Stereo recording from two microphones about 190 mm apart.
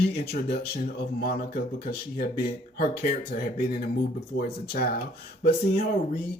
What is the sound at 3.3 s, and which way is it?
Speech, 50° left (ahead or behind).